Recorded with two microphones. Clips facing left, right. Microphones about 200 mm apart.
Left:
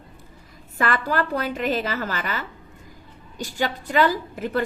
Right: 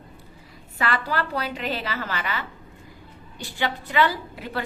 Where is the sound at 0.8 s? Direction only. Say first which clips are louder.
Left 3 dB; 50° left (ahead or behind).